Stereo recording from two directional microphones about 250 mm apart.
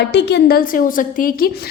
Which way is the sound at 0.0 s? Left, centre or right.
Left.